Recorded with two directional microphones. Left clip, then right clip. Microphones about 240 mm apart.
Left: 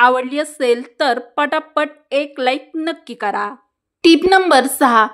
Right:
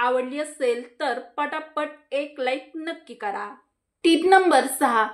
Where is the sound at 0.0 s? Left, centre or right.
Left.